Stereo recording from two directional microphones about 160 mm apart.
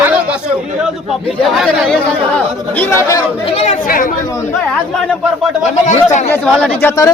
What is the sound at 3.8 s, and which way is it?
Speech, 60° left (ahead or behind).